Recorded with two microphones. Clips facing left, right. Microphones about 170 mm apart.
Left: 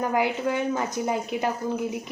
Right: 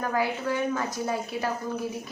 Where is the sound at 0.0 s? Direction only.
20° left (ahead or behind).